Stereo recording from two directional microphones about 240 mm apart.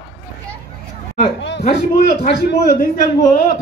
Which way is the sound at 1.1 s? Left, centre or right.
Left.